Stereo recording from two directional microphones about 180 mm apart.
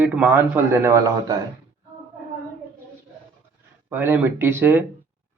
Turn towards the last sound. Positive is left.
turn(degrees=-10)  # may be behind; listen again after turning